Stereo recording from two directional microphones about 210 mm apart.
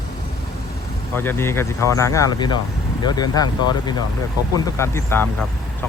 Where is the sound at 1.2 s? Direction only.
10° left (ahead or behind).